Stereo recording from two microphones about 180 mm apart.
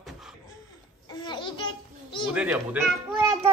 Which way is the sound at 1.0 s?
25° left (ahead or behind).